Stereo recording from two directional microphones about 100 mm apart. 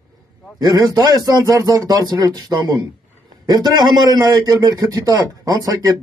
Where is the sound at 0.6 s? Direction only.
40° right (ahead or behind).